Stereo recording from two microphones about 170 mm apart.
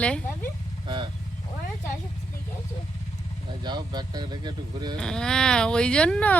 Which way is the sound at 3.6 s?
25° right (ahead or behind).